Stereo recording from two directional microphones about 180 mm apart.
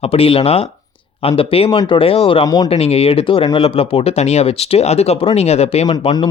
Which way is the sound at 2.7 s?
35° left (ahead or behind).